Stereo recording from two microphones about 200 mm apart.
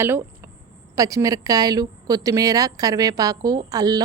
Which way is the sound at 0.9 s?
15° right (ahead or behind).